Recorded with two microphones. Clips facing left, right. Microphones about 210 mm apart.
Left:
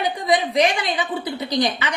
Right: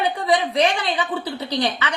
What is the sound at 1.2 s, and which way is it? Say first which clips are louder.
Speech: left 2 dB; 15° left (ahead or behind).